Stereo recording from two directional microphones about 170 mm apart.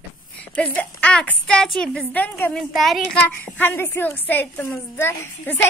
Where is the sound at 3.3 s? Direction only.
10° left (ahead or behind).